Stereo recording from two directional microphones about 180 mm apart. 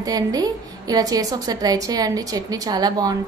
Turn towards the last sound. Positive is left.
turn(degrees=-20)  # may be behind; listen again after turning